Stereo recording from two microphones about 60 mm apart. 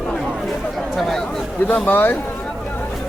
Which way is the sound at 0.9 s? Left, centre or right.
Centre.